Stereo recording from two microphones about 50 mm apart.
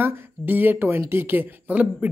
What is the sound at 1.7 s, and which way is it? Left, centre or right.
Speech, right.